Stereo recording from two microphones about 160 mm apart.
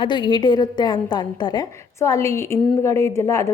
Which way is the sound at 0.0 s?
30° left (ahead or behind).